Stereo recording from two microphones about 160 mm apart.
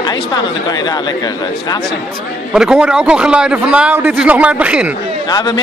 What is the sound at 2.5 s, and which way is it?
A man's voice, 5° right (ahead or behind).